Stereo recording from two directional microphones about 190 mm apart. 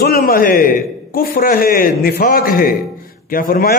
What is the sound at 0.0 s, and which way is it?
A man's voice, 50° left (ahead or behind).